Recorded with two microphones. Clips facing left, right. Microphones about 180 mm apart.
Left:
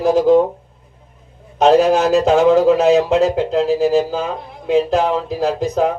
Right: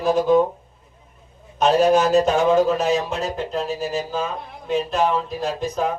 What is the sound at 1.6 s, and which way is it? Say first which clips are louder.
Speech: left 4 dB; 90° left.